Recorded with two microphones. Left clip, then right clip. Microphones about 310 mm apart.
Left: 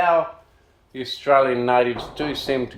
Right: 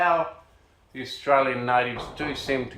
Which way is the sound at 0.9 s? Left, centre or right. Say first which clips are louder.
Left 4 dB; left.